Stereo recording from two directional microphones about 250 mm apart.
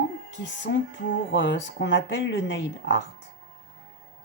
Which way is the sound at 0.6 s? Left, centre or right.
Left.